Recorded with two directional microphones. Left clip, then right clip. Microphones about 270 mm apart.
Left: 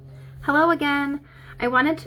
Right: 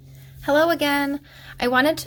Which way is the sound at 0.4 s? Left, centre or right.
Right.